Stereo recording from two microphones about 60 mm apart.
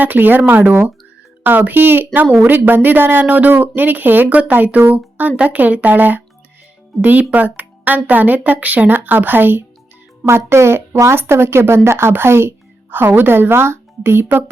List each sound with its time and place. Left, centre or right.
0.0 s a woman's voice: right
10.2 s a woman's voice: right